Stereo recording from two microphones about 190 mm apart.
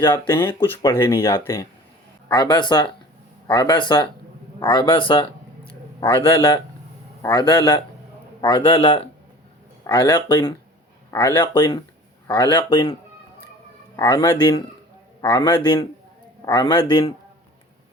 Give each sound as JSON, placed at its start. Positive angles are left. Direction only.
{"t": 0.1, "sound": "a man's voice", "side_deg": 10}